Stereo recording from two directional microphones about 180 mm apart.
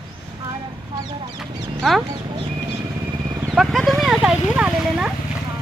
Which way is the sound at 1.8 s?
Centre (ahead or behind).